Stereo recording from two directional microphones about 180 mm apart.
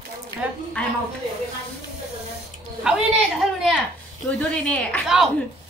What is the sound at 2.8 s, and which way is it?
Speech, 5° right (ahead or behind).